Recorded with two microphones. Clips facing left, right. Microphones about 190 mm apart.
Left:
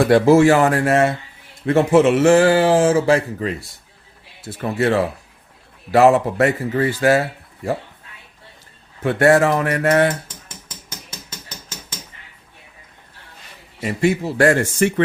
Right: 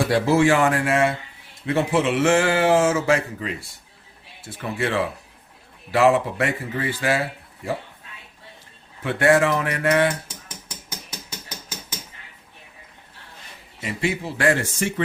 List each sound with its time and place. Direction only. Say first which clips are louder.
0.0 s speech: left 6 dB; 50° left (ahead or behind)
9.0 s speech: left 4 dB; 40° left (ahead or behind)
13.8 s speech: left 7 dB; 45° left (ahead or behind)